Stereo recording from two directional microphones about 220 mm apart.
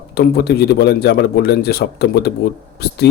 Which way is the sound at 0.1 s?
45° left (ahead or behind).